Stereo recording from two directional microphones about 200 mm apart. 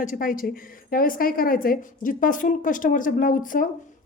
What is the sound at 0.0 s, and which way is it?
A woman's voice, 40° left (ahead or behind).